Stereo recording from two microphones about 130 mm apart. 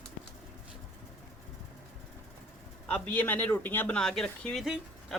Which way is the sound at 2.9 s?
10° left (ahead or behind).